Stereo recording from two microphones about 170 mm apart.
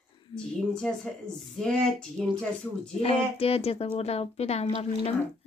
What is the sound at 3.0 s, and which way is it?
A woman's voice, 35° left (ahead or behind).